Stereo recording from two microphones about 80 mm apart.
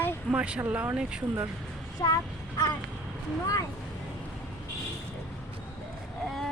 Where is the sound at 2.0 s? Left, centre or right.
Left.